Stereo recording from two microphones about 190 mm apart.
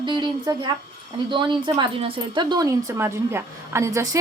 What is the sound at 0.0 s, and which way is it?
Speech, 25° right (ahead or behind).